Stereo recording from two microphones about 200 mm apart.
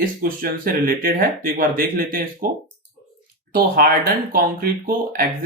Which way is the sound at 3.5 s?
50° right (ahead or behind).